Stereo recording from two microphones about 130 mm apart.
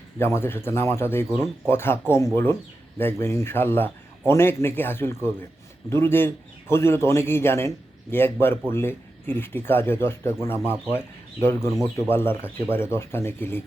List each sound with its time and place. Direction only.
0.3 s a man's voice: 20° left (ahead or behind)